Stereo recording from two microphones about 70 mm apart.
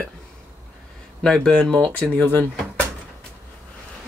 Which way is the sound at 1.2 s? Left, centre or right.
Centre.